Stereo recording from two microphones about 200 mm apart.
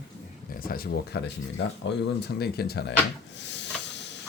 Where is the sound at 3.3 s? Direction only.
60° left (ahead or behind).